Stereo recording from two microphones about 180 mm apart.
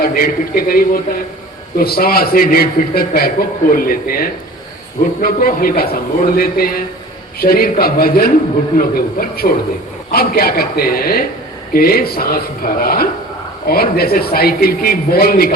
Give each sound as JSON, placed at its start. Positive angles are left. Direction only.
{"t": 0.0, "sound": "a man's voice", "side_deg": 55}